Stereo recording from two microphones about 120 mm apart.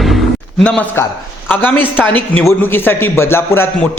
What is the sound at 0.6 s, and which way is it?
A man's voice, 10° left (ahead or behind).